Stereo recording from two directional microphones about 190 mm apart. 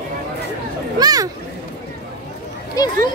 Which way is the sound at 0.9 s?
20° right (ahead or behind).